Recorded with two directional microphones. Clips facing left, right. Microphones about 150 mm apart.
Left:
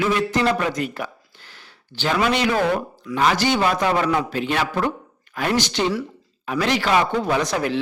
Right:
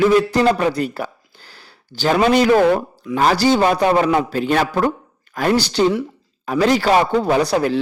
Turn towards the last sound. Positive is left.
turn(degrees=-35)  # may be behind; listen again after turning